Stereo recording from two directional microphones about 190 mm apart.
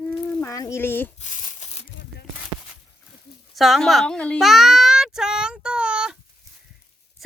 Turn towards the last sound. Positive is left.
turn(degrees=-5)  # may be behind; listen again after turning